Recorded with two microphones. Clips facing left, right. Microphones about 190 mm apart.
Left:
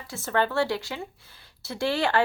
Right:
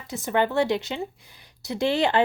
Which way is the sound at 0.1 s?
15° right (ahead or behind).